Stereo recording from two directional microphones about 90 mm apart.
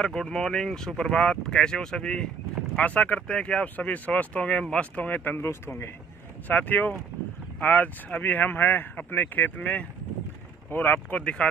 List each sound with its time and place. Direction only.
0.0 s speech: 10° left (ahead or behind); by 5.9 s 30° left (ahead or behind)
6.4 s speech: 20° left (ahead or behind)